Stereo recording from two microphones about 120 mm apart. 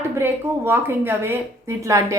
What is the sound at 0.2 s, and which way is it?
A woman's voice, 20° right (ahead or behind).